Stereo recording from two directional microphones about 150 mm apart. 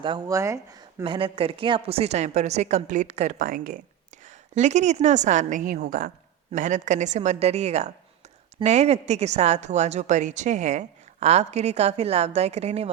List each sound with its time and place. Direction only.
0.0 s speech: 30° right (ahead or behind)
0.3 s speech: 20° right (ahead or behind)
1.0 s a woman's voice: 35° right (ahead or behind); by 3.8 s 65° right (ahead or behind)
4.3 s a woman's voice: 50° right (ahead or behind)